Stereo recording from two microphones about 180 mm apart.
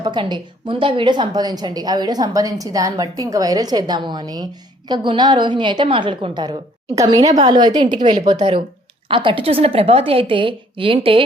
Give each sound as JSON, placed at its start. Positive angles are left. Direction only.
{"t": 0.0, "sound": "a woman's voice", "side_deg": -25}